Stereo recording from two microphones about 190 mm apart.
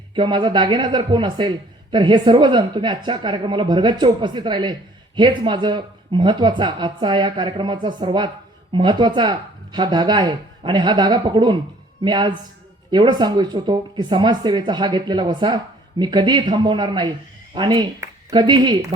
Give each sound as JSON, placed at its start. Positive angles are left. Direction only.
{"t": 0.1, "sound": "speech", "side_deg": -25}